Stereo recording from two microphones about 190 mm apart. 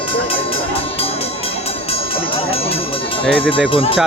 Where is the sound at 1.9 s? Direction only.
30° left (ahead or behind).